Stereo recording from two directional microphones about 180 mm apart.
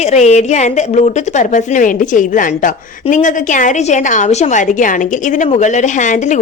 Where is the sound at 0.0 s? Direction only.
40° left (ahead or behind).